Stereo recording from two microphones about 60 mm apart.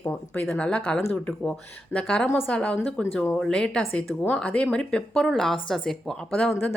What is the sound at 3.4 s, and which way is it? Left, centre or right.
Speech, centre.